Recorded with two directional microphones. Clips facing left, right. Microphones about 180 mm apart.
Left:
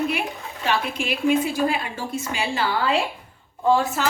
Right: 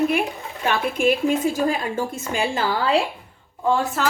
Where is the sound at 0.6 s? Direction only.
50° right (ahead or behind).